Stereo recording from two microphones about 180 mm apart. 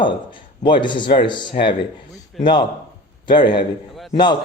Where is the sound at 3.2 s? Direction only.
25° left (ahead or behind).